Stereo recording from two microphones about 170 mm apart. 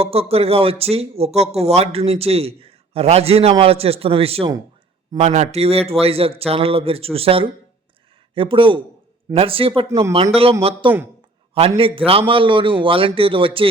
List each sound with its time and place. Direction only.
0.0 s speech: 35° right (ahead or behind)